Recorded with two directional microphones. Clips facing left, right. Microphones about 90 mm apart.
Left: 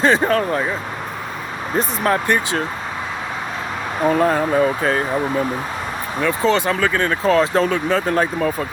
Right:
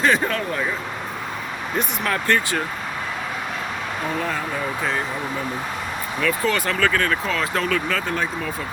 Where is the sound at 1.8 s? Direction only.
35° left (ahead or behind).